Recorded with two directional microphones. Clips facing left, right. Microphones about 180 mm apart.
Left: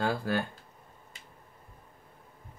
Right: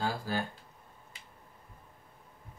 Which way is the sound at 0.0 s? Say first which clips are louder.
Left 4 dB; 60° left (ahead or behind).